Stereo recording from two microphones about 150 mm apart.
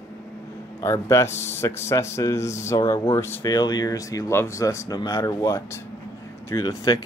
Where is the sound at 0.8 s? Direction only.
20° left (ahead or behind).